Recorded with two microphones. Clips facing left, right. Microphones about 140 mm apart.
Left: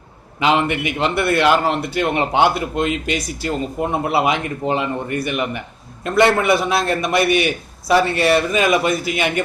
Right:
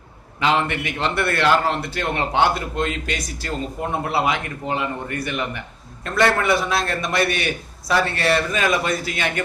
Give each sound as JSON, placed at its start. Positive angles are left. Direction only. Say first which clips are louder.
{"t": 0.3, "sound": "a man's voice", "louder": "left 3 dB", "side_deg": 15}